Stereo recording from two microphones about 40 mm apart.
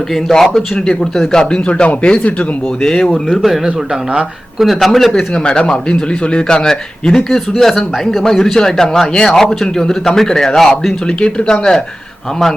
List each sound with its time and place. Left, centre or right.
0.3 s speech: centre
1.6 s speech: left
2.8 s speech: centre
4.6 s a man's voice: centre
5.1 s speech: left
11.2 s speech: left